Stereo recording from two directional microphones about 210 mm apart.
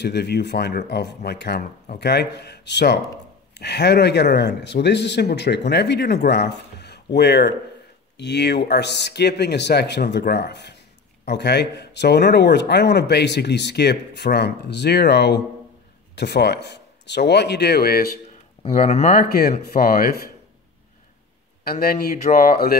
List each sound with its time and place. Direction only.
0.0 s speech: 50° left (ahead or behind)
18.6 s speech: 30° left (ahead or behind)
21.6 s speech: 45° left (ahead or behind)